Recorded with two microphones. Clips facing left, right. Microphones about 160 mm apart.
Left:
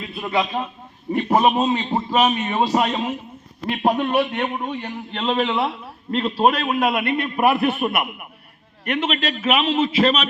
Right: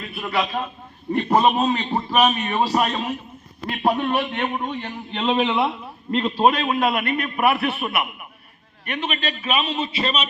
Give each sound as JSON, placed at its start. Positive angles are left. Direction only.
{"t": 0.1, "sound": "a man's voice", "side_deg": 20}
{"t": 5.1, "sound": "a man's voice", "side_deg": 0}
{"t": 7.0, "sound": "a man's voice", "side_deg": 25}
{"t": 8.8, "sound": "a man's voice", "side_deg": 90}